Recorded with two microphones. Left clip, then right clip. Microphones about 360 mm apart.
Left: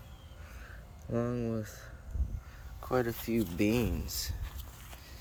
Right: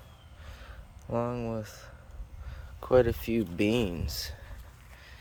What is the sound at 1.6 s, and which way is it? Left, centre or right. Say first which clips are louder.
Speech: right 2 dB; right.